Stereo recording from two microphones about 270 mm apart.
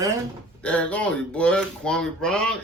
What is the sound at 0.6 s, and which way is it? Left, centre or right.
A man's voice, centre.